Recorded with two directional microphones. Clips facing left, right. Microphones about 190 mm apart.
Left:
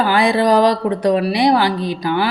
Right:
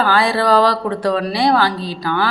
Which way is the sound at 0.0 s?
15° left (ahead or behind).